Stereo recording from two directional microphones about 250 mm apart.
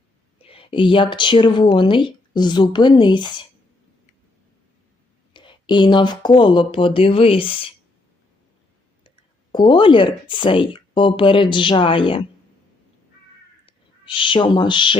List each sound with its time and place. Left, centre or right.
0.4 s speech: left
5.3 s speech: centre
9.0 s speech: centre
13.7 s speech: centre